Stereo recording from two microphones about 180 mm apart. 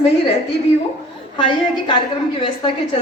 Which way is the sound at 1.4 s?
30° left (ahead or behind).